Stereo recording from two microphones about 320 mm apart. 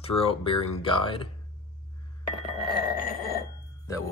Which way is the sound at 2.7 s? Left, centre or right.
Left.